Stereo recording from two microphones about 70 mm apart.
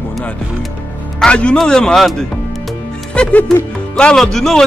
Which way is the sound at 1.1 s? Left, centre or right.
Centre.